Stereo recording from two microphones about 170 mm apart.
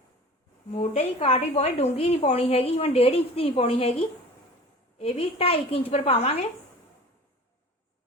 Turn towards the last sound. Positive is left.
turn(degrees=40)  # may be behind; listen again after turning